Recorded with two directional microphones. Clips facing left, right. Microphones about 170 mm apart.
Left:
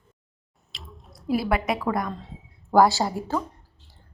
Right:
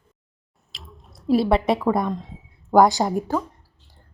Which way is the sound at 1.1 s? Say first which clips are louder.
Right 6 dB; 25° right (ahead or behind).